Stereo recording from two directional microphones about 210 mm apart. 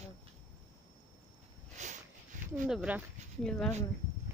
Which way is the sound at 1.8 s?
35° right (ahead or behind).